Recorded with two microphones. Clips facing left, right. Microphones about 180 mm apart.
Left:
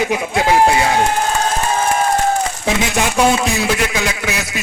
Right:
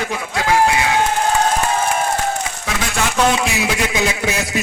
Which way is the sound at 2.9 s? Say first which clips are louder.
Left 1 dB; 10° left (ahead or behind).